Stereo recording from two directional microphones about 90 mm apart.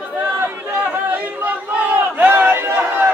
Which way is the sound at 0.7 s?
20° right (ahead or behind).